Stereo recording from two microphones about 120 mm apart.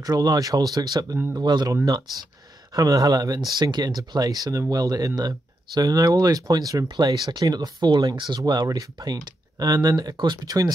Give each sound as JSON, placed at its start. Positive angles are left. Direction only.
{"t": 0.0, "sound": "speech", "side_deg": -35}